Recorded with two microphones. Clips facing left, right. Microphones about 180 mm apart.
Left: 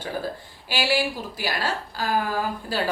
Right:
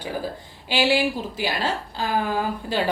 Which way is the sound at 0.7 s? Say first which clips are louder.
Right 3 dB; 20° right (ahead or behind).